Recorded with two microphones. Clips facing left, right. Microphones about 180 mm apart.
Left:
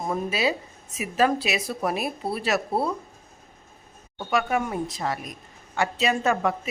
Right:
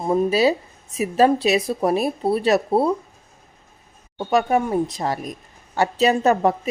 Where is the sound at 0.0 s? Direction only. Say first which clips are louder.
Right 8 dB; 30° right (ahead or behind).